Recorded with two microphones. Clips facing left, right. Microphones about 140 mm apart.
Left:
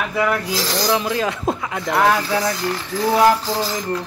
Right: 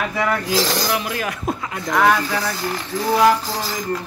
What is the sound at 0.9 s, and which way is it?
Speech, 25° left (ahead or behind).